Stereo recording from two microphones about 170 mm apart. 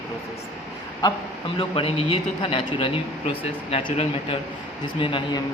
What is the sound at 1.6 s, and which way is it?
Speech, 35° left (ahead or behind).